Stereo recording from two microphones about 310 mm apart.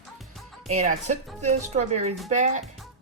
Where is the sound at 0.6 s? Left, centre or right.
Right.